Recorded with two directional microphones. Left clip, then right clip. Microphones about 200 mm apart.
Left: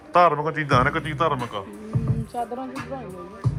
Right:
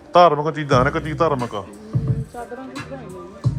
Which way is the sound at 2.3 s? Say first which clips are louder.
Left 7 dB; 45° left (ahead or behind).